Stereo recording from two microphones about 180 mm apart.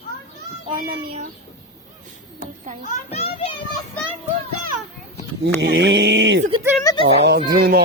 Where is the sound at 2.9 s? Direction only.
35° left (ahead or behind).